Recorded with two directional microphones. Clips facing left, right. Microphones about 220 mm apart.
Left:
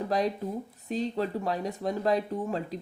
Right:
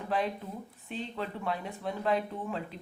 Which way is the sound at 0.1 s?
40° left (ahead or behind).